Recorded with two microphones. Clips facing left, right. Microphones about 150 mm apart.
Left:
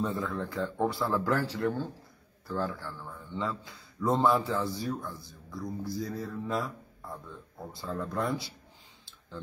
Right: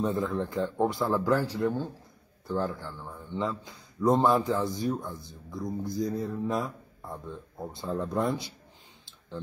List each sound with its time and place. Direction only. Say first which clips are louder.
0.0 s a man's voice: right 4 dB; 20° right (ahead or behind)